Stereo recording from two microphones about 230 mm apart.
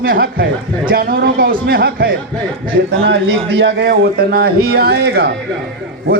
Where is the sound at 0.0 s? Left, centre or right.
Right.